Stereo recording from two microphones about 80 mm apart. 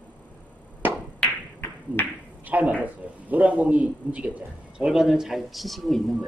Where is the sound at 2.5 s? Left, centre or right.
Centre.